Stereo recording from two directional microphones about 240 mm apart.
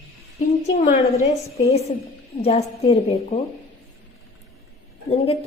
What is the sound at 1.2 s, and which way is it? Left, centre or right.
A woman's voice, left.